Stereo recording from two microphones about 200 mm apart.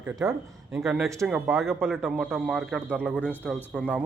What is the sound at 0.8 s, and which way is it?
A man's voice, centre (ahead or behind).